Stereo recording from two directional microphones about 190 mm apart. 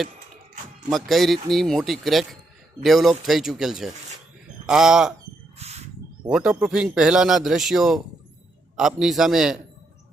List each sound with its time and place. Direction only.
0.9 s a man's voice: centre (ahead or behind)
5.5 s a sound: 35° right (ahead or behind)
6.2 s a man's voice: 5° right (ahead or behind)